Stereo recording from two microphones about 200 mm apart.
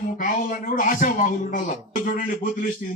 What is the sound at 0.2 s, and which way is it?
A man's voice, 40° left (ahead or behind).